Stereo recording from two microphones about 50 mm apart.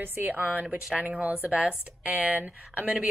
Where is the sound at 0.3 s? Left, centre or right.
Right.